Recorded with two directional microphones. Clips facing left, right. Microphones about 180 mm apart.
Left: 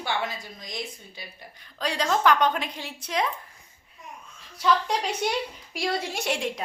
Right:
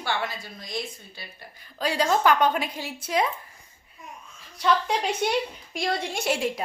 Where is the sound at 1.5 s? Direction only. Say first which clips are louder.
Right 3 dB; 5° right (ahead or behind).